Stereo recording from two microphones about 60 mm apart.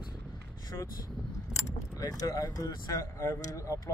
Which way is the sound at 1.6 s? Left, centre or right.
Left.